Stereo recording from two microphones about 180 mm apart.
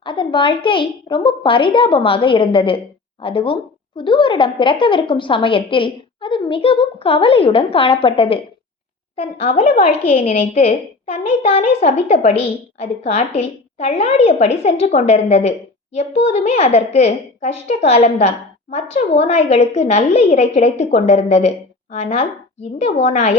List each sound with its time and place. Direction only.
0.0 s a woman's voice: 25° left (ahead or behind)